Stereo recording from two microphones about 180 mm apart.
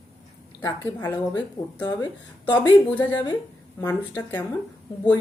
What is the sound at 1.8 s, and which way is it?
Speech, 25° left (ahead or behind).